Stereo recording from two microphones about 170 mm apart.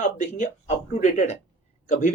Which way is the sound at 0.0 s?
45° left (ahead or behind).